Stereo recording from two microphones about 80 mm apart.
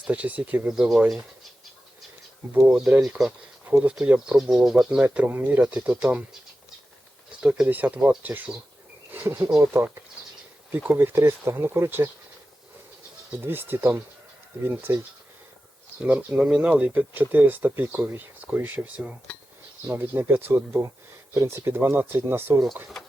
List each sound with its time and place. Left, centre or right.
0.0 s speech: centre
0.7 s speech: centre
2.6 s speech: centre
4.3 s speech: centre
5.0 s speech: right
7.4 s speech: centre
7.7 s speech: right
9.0 s insect: right
9.6 s speech: right
10.9 s speech: right
13.4 s speech: right
16.0 s speech: centre; by 22.5 s right